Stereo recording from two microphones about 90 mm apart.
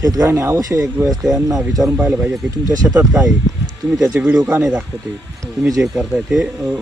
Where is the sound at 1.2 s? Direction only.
5° right (ahead or behind).